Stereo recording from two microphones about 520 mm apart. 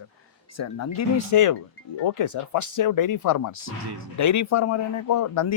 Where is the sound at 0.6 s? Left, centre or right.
Left.